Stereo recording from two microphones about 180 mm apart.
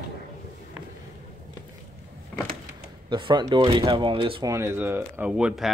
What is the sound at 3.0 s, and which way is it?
Speech, 25° right (ahead or behind).